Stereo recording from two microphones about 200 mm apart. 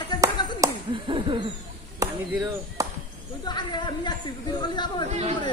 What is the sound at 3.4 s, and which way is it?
Speech, 20° left (ahead or behind).